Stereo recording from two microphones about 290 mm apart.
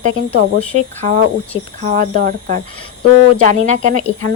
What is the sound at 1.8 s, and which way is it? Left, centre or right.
Speech, right.